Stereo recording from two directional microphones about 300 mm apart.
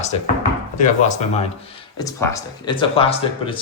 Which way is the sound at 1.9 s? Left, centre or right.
Centre.